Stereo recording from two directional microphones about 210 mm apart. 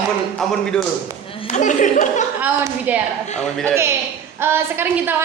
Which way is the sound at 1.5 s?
35° left (ahead or behind).